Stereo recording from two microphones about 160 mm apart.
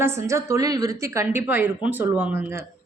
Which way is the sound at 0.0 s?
15° right (ahead or behind).